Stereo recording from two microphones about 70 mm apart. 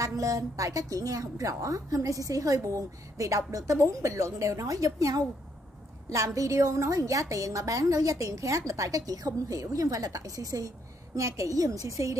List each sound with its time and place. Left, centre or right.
0.0 s a woman's voice: right